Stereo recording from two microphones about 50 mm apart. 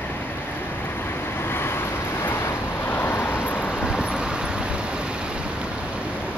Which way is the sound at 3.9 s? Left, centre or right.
Centre.